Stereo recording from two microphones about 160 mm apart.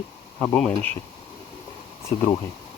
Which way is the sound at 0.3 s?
5° left (ahead or behind).